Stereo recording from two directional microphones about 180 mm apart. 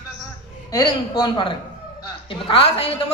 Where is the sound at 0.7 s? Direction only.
20° left (ahead or behind).